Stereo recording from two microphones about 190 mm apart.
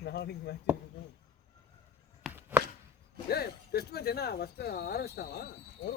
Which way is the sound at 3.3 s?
55° left (ahead or behind).